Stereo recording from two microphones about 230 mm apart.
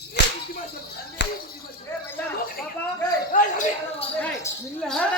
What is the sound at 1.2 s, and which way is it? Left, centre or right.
Speech, left.